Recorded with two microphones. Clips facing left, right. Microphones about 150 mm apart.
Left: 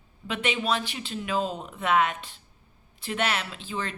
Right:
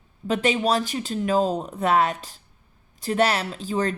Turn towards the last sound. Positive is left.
turn(degrees=-40)  # may be behind; listen again after turning